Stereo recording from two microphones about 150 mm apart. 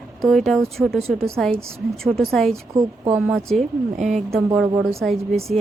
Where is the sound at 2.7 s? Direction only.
25° right (ahead or behind).